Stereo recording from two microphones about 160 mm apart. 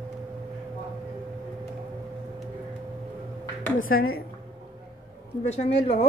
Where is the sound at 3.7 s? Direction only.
65° left (ahead or behind).